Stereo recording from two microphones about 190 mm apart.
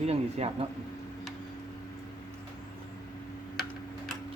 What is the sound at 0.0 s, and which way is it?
Speech, 35° right (ahead or behind).